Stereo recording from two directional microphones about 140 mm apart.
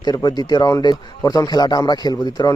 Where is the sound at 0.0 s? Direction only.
30° left (ahead or behind).